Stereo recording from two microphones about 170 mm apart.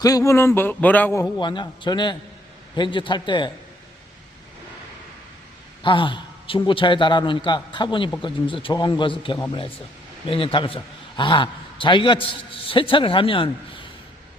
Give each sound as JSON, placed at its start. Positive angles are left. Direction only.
{"t": 0.0, "sound": "a man's voice", "side_deg": 20}
{"t": 5.8, "sound": "a man's voice", "side_deg": 30}